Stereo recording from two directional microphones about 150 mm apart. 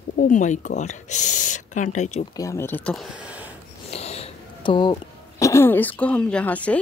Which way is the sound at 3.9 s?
45° left (ahead or behind).